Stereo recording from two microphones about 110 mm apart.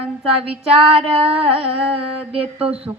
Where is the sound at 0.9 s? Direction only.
60° right (ahead or behind).